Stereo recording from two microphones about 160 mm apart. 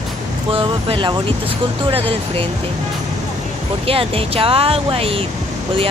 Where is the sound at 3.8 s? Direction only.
35° right (ahead or behind).